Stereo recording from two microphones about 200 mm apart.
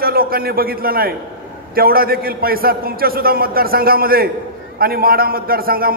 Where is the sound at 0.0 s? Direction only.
50° right (ahead or behind).